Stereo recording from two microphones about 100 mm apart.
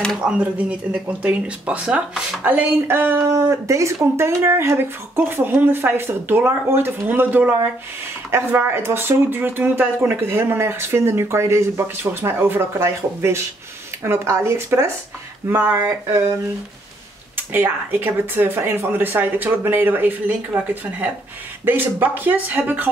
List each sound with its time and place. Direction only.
0.2 s speech: 15° right (ahead or behind)
3.2 s speech: 35° right (ahead or behind)
15.4 s speech: 15° right (ahead or behind)
15.7 s speech: 30° right (ahead or behind)
17.4 s speech: 20° right (ahead or behind)